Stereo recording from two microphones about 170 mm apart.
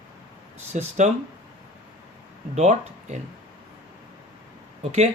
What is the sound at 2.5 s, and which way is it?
Speech, 40° right (ahead or behind).